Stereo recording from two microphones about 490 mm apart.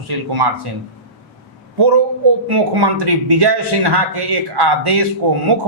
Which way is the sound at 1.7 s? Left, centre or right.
Right.